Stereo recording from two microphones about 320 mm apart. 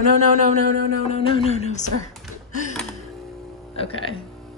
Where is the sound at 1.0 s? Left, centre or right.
Centre.